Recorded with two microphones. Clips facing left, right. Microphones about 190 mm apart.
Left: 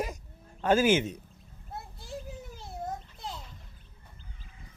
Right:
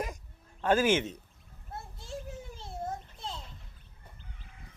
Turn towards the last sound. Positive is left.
turn(degrees=-25)  # may be behind; listen again after turning